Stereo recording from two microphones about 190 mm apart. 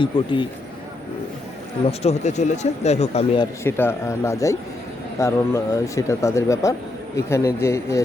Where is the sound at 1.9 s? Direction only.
35° left (ahead or behind).